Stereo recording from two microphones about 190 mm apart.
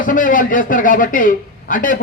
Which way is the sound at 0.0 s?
45° left (ahead or behind).